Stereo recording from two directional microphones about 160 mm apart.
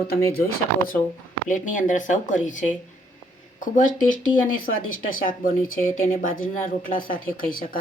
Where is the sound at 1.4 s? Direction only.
55° left (ahead or behind).